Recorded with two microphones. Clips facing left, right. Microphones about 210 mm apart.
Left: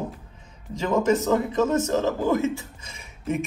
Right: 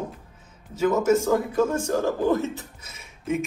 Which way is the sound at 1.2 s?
10° right (ahead or behind).